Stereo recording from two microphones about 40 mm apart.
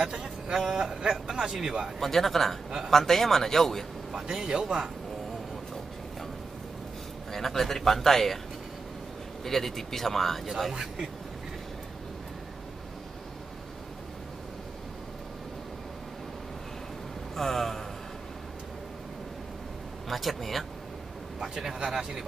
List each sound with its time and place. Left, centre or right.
0.0 s a sound: centre
0.6 s speech: centre
2.0 s speech: centre
4.1 s speech: centre
7.3 s speech: centre
9.4 s speech: centre
10.7 s speech: centre
17.4 s a man's voice: centre
20.1 s speech: centre
21.4 s speech: centre